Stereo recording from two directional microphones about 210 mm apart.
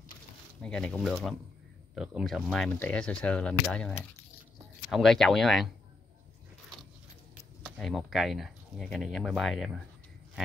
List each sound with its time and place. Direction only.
0.6 s speech: 5° left (ahead or behind)
7.6 s speech: centre (ahead or behind)